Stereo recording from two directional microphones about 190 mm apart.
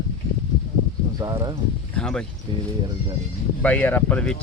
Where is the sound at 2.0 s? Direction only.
5° left (ahead or behind).